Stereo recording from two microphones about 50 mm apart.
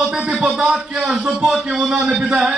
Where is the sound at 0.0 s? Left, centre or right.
Centre.